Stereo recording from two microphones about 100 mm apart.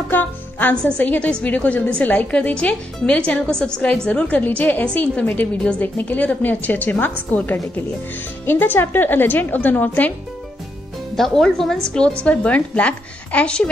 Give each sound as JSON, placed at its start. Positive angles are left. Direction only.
{"t": 0.1, "sound": "music", "side_deg": 20}
{"t": 0.8, "sound": "a woman's voice", "side_deg": 15}
{"t": 11.1, "sound": "a woman's voice", "side_deg": 5}